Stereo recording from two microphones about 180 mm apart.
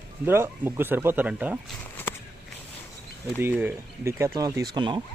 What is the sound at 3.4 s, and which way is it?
Speech, 10° right (ahead or behind).